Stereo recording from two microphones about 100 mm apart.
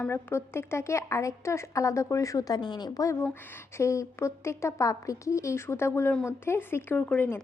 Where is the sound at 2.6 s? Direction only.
50° left (ahead or behind); by 7.4 s 15° left (ahead or behind).